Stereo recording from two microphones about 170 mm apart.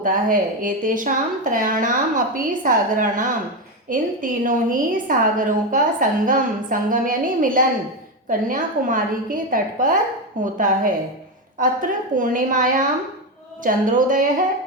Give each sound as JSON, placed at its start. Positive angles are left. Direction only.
{"t": 0.0, "sound": "a woman's voice", "side_deg": -55}